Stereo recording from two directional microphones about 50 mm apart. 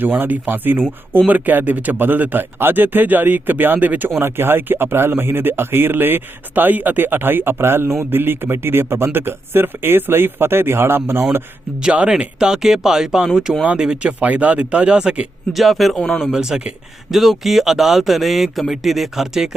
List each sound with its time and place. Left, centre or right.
0.0 s speech: right
4.1 s speech: right
11.8 s speech: centre
13.7 s speech: centre
14.0 s speech: right
15.5 s speech: centre
16.0 s speech: centre
16.2 s speech: centre